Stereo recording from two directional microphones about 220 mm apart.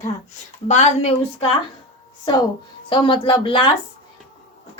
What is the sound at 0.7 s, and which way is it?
Speech, 30° left (ahead or behind).